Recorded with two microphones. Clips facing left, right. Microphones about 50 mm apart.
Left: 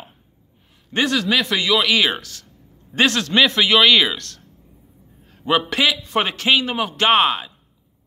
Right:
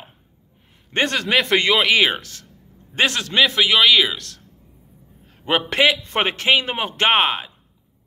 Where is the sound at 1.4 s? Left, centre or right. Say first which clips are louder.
Right 4 dB; right.